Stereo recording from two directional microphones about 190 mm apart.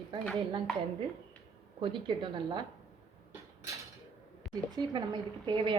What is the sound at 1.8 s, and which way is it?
Speech, 25° right (ahead or behind).